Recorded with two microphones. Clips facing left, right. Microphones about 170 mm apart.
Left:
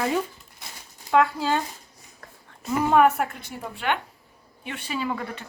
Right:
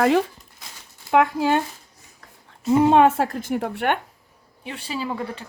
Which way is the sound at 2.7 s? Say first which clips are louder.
Right 4 dB; 25° right (ahead or behind).